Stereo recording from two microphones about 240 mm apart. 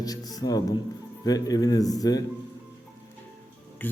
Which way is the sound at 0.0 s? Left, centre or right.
Centre.